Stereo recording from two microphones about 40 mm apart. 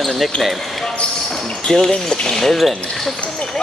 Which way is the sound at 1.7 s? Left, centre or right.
Centre.